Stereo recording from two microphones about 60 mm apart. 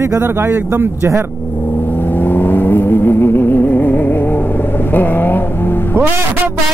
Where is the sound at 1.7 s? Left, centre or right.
Left.